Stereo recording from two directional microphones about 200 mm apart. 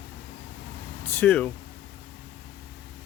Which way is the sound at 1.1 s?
5° left (ahead or behind).